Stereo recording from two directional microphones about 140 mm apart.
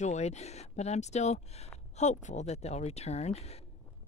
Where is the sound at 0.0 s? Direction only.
55° left (ahead or behind).